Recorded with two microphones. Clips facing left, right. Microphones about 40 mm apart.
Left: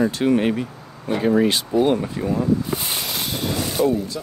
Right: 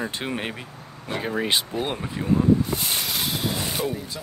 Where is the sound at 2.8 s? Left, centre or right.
Centre.